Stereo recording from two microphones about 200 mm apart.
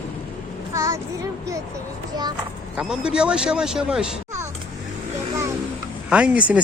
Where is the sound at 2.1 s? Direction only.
20° right (ahead or behind).